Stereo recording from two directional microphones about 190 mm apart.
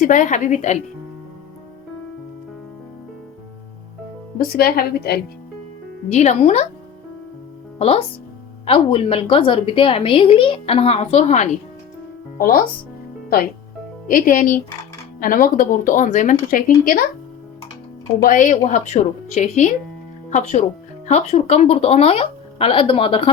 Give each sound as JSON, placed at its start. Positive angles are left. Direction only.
{"t": 0.0, "sound": "a woman's voice", "side_deg": 45}
{"t": 4.4, "sound": "speech", "side_deg": 50}
{"t": 6.1, "sound": "a woman's voice", "side_deg": 35}
{"t": 7.8, "sound": "a woman's voice", "side_deg": 30}
{"t": 14.1, "sound": "speech", "side_deg": 45}
{"t": 18.2, "sound": "a woman's voice", "side_deg": 45}